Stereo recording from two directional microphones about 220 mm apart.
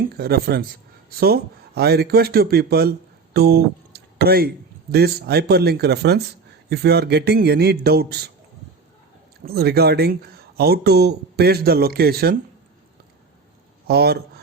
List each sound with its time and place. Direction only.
0.1 s speech: 45° right (ahead or behind)
3.3 s music: 45° right (ahead or behind)
4.9 s speech: 45° right (ahead or behind)
9.4 s speech: 45° right (ahead or behind)
13.8 s speech: 45° right (ahead or behind)